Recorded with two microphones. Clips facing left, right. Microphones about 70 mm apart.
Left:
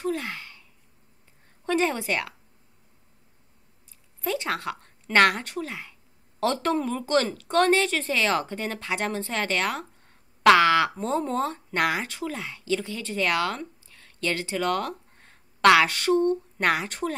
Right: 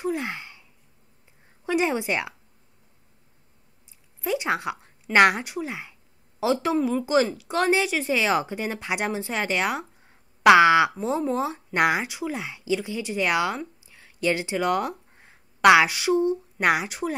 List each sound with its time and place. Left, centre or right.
0.0 s a sound: centre
1.7 s a woman's voice: centre
4.2 s a woman's voice: centre
6.4 s a woman's voice: centre
11.0 s speech: centre